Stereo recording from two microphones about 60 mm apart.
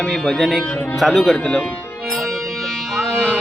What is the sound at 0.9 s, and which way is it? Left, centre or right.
Speech, centre.